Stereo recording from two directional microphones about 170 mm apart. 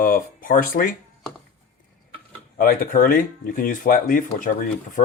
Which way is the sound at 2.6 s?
55° left (ahead or behind).